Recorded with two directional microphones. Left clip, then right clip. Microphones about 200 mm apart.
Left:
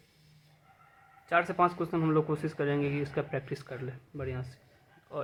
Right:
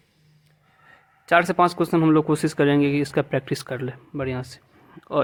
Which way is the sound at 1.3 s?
60° right (ahead or behind).